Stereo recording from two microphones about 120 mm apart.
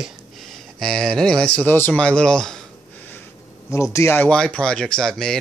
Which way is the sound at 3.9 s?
20° left (ahead or behind).